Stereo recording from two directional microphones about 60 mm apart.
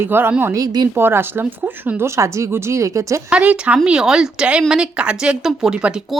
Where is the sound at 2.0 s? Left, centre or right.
Right.